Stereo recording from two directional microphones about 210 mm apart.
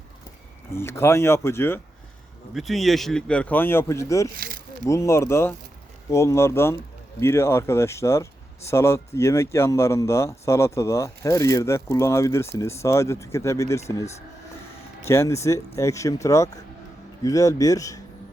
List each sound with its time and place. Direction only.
0.8 s speech: 10° left (ahead or behind)
2.5 s speech: centre (ahead or behind)
4.4 s a sound: 45° right (ahead or behind)
4.9 s speech: 15° left (ahead or behind)